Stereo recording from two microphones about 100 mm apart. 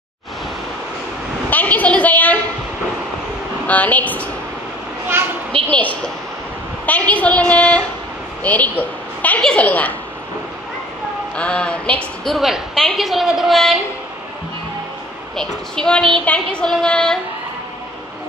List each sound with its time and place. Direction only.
1.5 s a sound: 15° left (ahead or behind)
3.6 s a woman's voice: 15° left (ahead or behind)
5.7 s a woman's voice: 15° left (ahead or behind)
11.3 s a woman's voice: 10° left (ahead or behind)
12.4 s a woman's voice: 5° right (ahead or behind)
15.3 s a woman's voice: 5° left (ahead or behind)